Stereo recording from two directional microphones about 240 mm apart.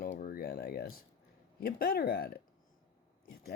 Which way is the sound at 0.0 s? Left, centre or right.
Left.